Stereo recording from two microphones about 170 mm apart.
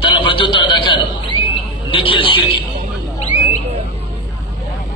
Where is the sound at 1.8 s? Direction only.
30° left (ahead or behind).